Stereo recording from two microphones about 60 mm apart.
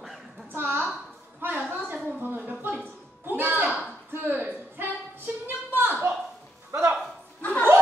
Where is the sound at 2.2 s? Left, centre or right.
Right.